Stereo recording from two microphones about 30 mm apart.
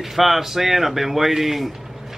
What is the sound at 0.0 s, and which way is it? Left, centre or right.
Speech, centre.